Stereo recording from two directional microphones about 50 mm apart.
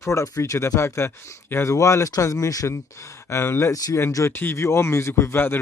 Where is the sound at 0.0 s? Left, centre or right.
Left.